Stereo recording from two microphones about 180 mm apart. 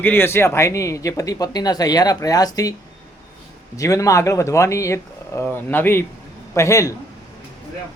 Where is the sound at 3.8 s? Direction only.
20° left (ahead or behind).